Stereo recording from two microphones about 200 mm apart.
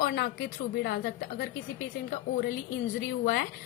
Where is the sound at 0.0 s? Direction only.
50° left (ahead or behind).